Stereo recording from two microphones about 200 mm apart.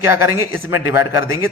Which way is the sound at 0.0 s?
15° right (ahead or behind).